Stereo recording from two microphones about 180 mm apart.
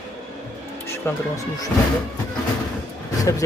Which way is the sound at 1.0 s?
10° left (ahead or behind).